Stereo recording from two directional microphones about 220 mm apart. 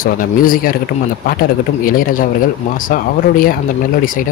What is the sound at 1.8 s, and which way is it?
Speech, 40° left (ahead or behind).